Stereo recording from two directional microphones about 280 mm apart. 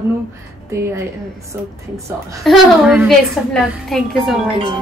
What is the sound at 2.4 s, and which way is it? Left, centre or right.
A woman's voice, centre.